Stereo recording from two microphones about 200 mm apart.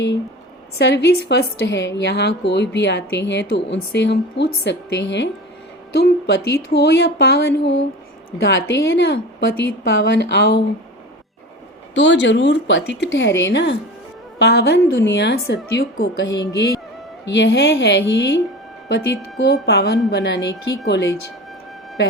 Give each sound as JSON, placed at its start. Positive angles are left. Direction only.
{"t": 0.8, "sound": "a woman's voice", "side_deg": 60}
{"t": 11.9, "sound": "a woman's voice", "side_deg": 60}